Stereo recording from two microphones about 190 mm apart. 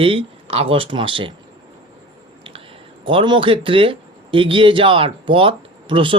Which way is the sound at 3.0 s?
25° right (ahead or behind).